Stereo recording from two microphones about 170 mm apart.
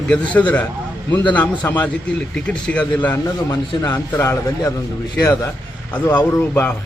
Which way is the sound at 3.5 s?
25° left (ahead or behind).